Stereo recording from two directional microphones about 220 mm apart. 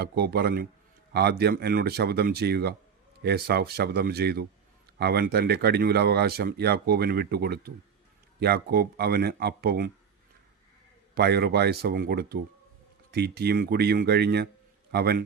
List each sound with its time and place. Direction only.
0.0 s speech: 45° right (ahead or behind)
11.1 s speech: 45° right (ahead or behind)